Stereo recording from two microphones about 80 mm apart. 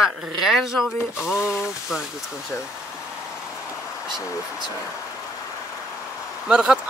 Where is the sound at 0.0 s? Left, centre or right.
Centre.